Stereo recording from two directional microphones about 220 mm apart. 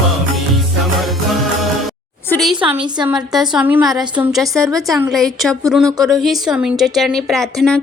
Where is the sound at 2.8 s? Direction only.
20° right (ahead or behind).